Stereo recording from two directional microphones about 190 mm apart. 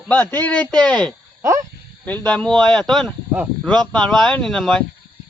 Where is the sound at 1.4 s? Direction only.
15° right (ahead or behind).